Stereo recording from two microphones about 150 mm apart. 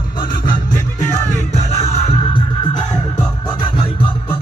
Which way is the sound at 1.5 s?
45° left (ahead or behind).